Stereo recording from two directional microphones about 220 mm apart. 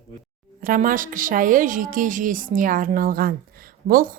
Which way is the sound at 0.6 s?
40° right (ahead or behind).